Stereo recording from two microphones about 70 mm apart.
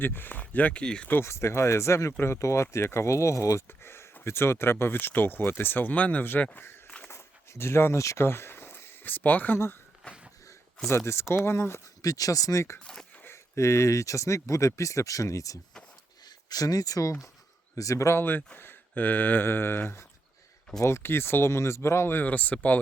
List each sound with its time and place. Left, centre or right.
0.0 s speech: left; by 1.0 s centre
1.2 s speech: left
3.7 s speech: left
7.1 s speech: left
10.8 s speech: left
12.0 s speech: left
12.8 s speech: centre
13.3 s speech: left
16.2 s speech: left
18.2 s speech: left